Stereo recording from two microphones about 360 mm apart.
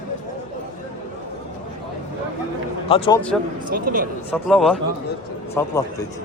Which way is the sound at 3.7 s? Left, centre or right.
Right.